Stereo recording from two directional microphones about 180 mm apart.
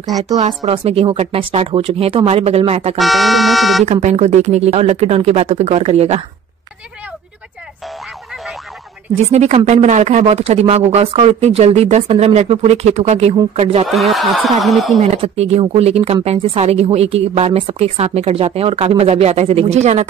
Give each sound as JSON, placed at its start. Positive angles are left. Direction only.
{"t": 0.4, "sound": "speech", "side_deg": -30}
{"t": 3.0, "sound": "speech", "side_deg": 0}
{"t": 3.8, "sound": "speech", "side_deg": -40}
{"t": 9.1, "sound": "speech", "side_deg": -35}
{"t": 13.8, "sound": "speech", "side_deg": 0}
{"t": 15.0, "sound": "speech", "side_deg": -35}